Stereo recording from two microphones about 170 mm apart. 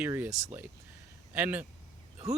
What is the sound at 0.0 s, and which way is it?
Speech, 10° right (ahead or behind).